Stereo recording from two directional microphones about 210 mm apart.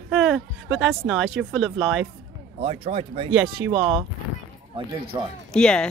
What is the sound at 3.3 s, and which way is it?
Speech, 70° right (ahead or behind).